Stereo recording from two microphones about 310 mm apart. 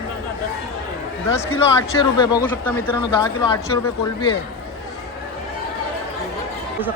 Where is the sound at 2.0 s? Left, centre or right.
Centre.